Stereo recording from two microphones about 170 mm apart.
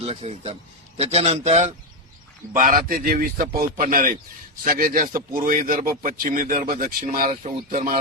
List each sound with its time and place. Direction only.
0.0 s a man's voice: 40° right (ahead or behind)
2.6 s a man's voice: 50° right (ahead or behind)
7.3 s speech: 45° right (ahead or behind)